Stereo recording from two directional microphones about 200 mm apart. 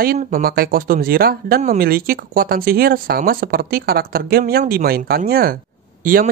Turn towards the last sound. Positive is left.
turn(degrees=-45)  # may be behind; listen again after turning